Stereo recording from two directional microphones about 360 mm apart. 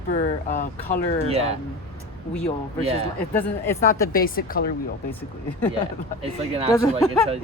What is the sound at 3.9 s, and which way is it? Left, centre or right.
Speech, left.